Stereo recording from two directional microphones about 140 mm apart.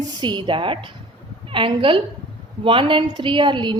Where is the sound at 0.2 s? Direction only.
35° right (ahead or behind).